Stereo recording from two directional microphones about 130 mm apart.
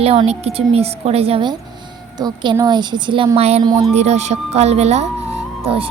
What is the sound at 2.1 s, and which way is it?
Speech, 35° right (ahead or behind).